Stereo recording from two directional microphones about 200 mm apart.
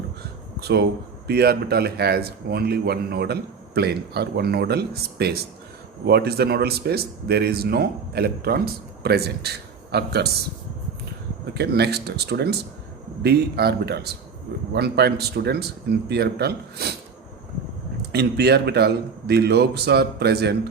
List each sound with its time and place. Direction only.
0.6 s a man's voice: 55° right (ahead or behind)
11.5 s a man's voice: 55° right (ahead or behind)
18.1 s a man's voice: 55° right (ahead or behind)